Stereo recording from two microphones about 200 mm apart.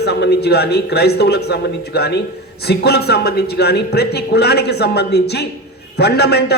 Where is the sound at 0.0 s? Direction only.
55° left (ahead or behind).